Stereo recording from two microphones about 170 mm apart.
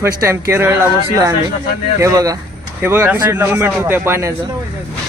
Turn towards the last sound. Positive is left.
turn(degrees=-15)  # may be behind; listen again after turning